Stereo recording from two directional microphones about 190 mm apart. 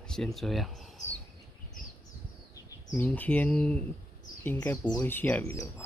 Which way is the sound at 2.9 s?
10° left (ahead or behind).